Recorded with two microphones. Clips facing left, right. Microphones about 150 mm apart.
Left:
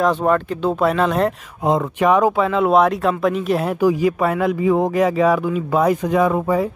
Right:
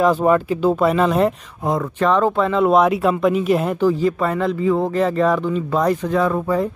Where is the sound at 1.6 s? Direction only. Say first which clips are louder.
Left 2 dB; 20° left (ahead or behind).